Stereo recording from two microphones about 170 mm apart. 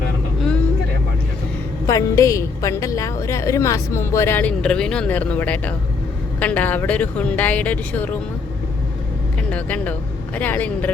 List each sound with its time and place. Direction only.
1.9 s a woman's voice: 20° left (ahead or behind)
9.5 s a woman's voice: 10° left (ahead or behind)